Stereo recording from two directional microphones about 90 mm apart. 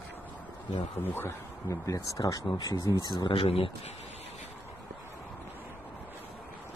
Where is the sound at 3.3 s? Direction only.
85° left.